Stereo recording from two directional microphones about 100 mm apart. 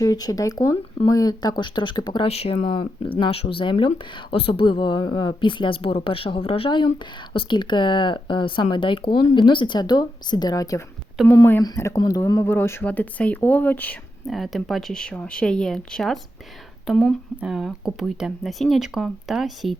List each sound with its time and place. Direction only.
0.0 s speech: 40° left (ahead or behind)
2.2 s a woman's voice: 90° left; by 10.8 s 35° left (ahead or behind)
11.2 s speech: 5° right (ahead or behind)
11.8 s speech: 35° left (ahead or behind)
12.5 s speech: 25° left (ahead or behind)
14.3 s speech: centre (ahead or behind)